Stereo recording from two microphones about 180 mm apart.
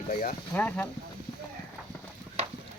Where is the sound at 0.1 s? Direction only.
50° left (ahead or behind).